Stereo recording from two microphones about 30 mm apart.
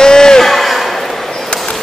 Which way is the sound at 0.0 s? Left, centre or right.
Left.